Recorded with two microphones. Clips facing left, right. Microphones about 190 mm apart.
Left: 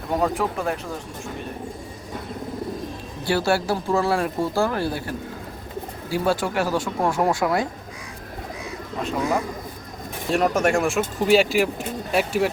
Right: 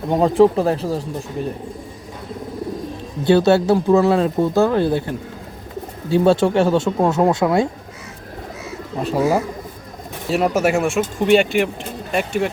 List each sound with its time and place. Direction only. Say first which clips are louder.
0.1 s speech: right 9 dB; 25° right (ahead or behind)
3.2 s speech: right 8 dB; 20° right (ahead or behind)
10.2 s speech: right 3 dB; 5° right (ahead or behind)